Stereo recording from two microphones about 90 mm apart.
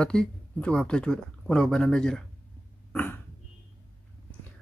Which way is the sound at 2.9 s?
15° left (ahead or behind).